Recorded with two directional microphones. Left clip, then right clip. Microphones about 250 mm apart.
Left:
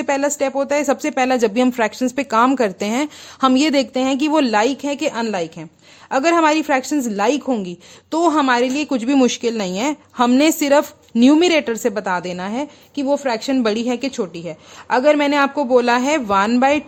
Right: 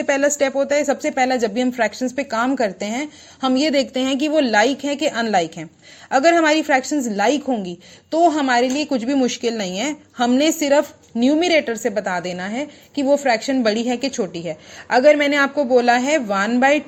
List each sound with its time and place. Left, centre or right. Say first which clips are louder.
0.0 s a woman's voice: right 1 dB; centre